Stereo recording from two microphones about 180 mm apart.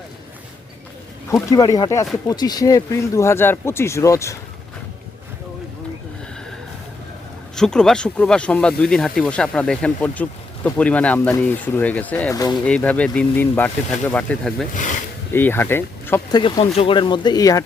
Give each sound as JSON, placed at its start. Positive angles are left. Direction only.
{"t": 1.3, "sound": "speech", "side_deg": 15}
{"t": 7.5, "sound": "speech", "side_deg": 5}
{"t": 12.4, "sound": "speech", "side_deg": 20}
{"t": 12.6, "sound": "speech", "side_deg": 5}
{"t": 16.3, "sound": "speech", "side_deg": 25}